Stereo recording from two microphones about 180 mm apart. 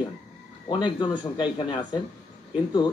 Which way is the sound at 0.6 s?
25° left (ahead or behind).